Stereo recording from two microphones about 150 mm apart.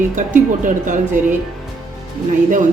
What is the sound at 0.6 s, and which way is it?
Speech, 60° right (ahead or behind).